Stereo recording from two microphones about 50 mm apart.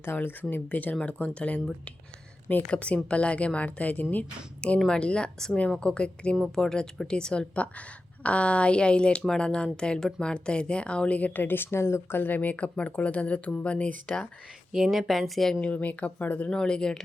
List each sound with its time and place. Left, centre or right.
0.0 s speech: left
0.5 s speech: left
0.9 s a woman's voice: left
2.6 s a woman's voice: left
6.6 s a woman's voice: centre
11.3 s speech: left
14.7 s speech: centre
15.6 s a woman's voice: left
16.5 s speech: centre